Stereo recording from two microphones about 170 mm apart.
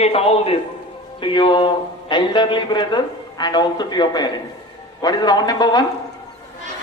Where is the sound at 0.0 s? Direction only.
35° left (ahead or behind).